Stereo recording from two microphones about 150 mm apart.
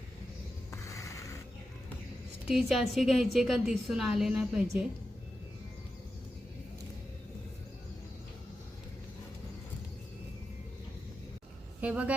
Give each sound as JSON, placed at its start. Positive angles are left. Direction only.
{"t": 0.7, "sound": "a sound", "side_deg": 20}
{"t": 2.5, "sound": "a woman's voice", "side_deg": 0}
{"t": 11.8, "sound": "speech", "side_deg": -10}